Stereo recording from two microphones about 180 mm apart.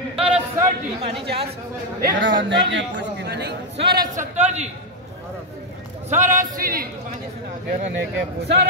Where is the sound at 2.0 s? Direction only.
85° right; by 4.0 s 65° right (ahead or behind).